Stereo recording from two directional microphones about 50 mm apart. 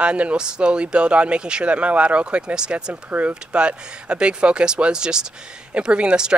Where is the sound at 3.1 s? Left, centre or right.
Right.